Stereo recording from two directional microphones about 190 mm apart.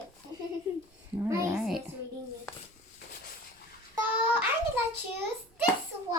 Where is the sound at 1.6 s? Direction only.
Centre (ahead or behind).